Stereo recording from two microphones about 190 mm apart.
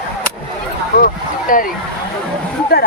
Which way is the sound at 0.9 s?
50° left (ahead or behind).